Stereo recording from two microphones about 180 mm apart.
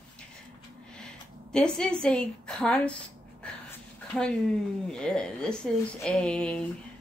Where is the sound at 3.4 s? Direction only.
5° left (ahead or behind).